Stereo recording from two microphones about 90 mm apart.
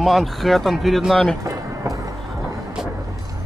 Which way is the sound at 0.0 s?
Centre (ahead or behind).